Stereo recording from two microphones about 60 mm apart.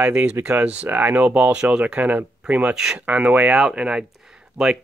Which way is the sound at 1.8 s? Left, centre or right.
Right.